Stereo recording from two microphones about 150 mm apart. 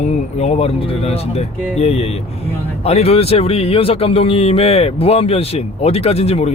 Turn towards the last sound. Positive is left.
turn(degrees=45)  # may be behind; listen again after turning